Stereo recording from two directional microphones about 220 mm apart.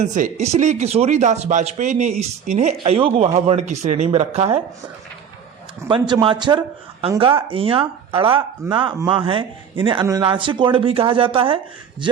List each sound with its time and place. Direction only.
0.0 s a man's voice: 35° right (ahead or behind)
5.9 s a man's voice: 20° right (ahead or behind)